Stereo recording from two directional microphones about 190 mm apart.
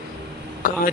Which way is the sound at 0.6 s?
45° left (ahead or behind).